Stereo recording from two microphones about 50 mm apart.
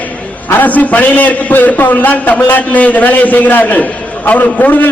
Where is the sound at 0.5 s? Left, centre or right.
Left.